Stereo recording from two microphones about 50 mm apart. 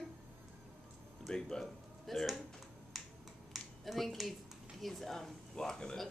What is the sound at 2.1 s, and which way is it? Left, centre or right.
Speech, centre.